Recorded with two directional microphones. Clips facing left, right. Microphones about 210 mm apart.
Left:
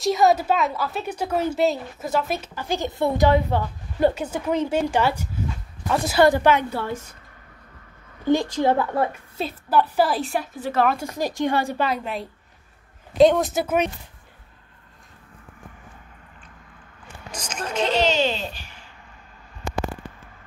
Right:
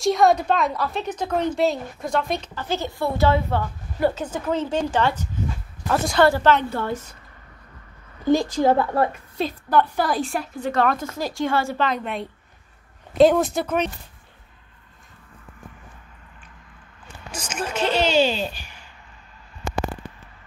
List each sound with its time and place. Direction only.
0.0 s a woman's voice: centre (ahead or behind)
6.2 s a woman's voice: 15° left (ahead or behind)
8.9 s a woman's voice: 5° left (ahead or behind)
11.1 s a woman's voice: 15° left (ahead or behind)
17.3 s a woman's voice: 5° right (ahead or behind)